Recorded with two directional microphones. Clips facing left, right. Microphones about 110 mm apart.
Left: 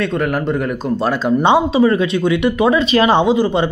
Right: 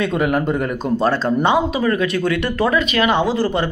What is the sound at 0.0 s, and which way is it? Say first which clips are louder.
A man's voice: even; centre (ahead or behind).